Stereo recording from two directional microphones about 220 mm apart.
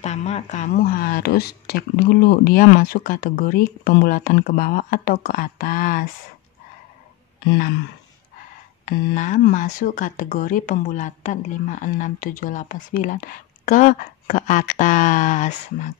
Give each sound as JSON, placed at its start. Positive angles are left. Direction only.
{"t": 0.0, "sound": "speech", "side_deg": 30}
{"t": 8.8, "sound": "speech", "side_deg": 35}